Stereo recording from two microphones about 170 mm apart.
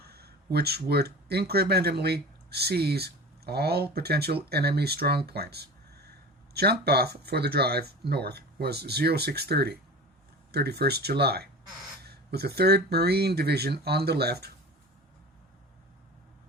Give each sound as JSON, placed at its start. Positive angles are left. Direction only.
{"t": 0.0, "sound": "speech", "side_deg": -70}